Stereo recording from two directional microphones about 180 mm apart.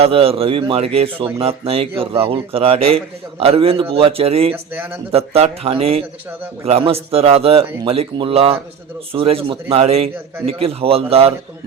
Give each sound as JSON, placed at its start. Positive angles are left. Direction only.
{"t": 0.0, "sound": "a man's voice", "side_deg": -30}
{"t": 4.5, "sound": "a man's voice", "side_deg": -10}
{"t": 5.1, "sound": "a man's voice", "side_deg": -35}